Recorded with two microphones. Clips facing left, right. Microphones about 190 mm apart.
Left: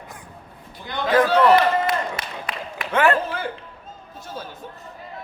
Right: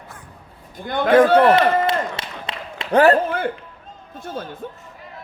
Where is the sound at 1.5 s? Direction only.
25° right (ahead or behind).